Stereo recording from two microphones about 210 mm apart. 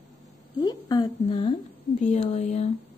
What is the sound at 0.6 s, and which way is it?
Speech, 20° left (ahead or behind).